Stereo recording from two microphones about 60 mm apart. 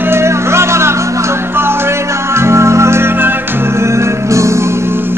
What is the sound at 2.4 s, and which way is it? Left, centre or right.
Music, right.